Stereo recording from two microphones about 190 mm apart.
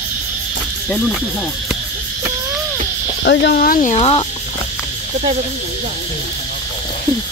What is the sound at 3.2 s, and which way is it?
Speech, 65° left (ahead or behind).